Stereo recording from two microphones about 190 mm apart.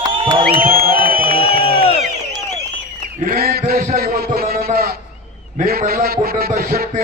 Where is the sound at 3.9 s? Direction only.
50° right (ahead or behind).